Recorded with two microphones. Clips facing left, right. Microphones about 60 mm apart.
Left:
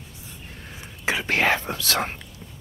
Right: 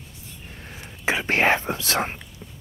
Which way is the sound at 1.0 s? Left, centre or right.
Right.